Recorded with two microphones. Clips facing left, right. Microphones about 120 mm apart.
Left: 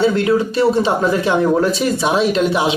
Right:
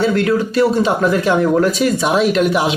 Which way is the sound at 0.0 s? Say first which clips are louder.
Left 1 dB; 20° left (ahead or behind).